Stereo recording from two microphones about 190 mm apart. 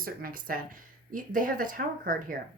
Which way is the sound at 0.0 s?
50° right (ahead or behind).